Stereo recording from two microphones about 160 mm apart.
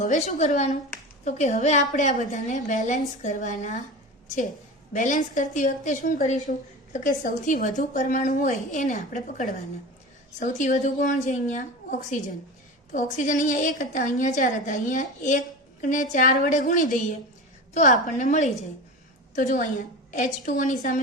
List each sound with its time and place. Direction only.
0.0 s a woman's voice: 50° left (ahead or behind)
4.9 s a woman's voice: 50° left (ahead or behind)